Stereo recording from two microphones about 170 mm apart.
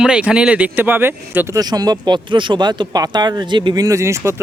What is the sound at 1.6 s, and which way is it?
Speech, 25° right (ahead or behind).